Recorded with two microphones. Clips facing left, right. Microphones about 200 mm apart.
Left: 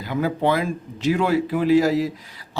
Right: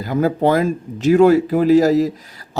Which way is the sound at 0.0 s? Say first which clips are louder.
Right 5 dB; 45° right (ahead or behind).